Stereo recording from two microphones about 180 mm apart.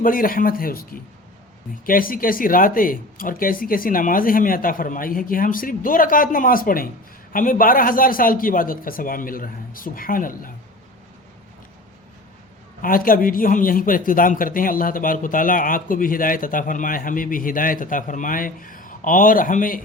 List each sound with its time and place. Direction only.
0.0 s speech: 50° left (ahead or behind)
12.8 s speech: 50° left (ahead or behind)